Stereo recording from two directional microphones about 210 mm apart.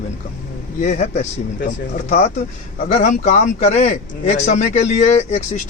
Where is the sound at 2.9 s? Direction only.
35° left (ahead or behind).